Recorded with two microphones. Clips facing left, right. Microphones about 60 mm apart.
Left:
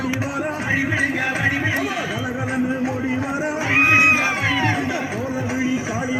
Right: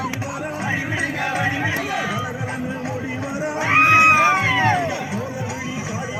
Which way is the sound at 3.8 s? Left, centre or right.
Left.